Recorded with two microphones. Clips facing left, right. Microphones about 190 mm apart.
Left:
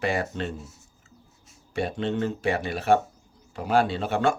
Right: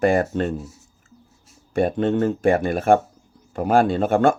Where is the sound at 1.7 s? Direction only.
50° right (ahead or behind).